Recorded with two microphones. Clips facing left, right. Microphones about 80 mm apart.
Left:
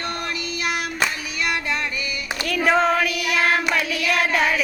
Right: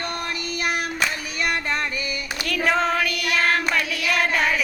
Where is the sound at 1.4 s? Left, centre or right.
Right.